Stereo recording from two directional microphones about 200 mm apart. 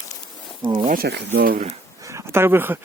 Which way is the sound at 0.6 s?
25° right (ahead or behind).